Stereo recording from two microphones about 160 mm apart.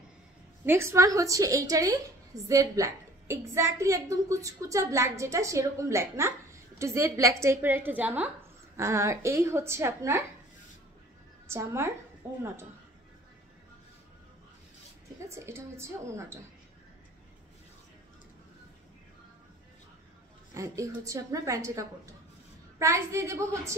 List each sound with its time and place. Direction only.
0.7 s a woman's voice: 15° right (ahead or behind)
11.4 s a woman's voice: 15° right (ahead or behind)
15.1 s a woman's voice: 15° right (ahead or behind)
20.5 s a woman's voice: 20° right (ahead or behind)